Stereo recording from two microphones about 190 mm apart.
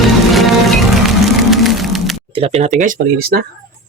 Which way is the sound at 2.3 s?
30° right (ahead or behind).